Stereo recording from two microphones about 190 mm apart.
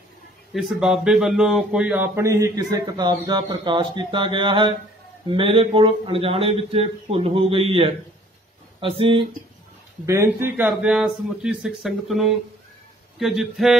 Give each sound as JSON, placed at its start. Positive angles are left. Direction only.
{"t": 0.5, "sound": "speech", "side_deg": 0}
{"t": 2.1, "sound": "a man's voice", "side_deg": -15}
{"t": 10.0, "sound": "a man's voice", "side_deg": -15}